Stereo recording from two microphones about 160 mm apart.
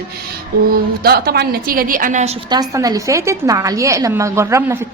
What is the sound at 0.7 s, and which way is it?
A woman's voice, 75° right (ahead or behind).